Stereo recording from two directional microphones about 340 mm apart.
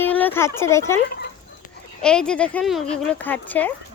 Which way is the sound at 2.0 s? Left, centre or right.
Centre.